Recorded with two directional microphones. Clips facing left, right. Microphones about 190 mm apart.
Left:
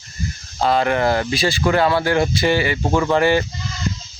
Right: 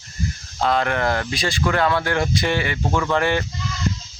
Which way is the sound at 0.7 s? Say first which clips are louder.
Left 4 dB; 5° left (ahead or behind).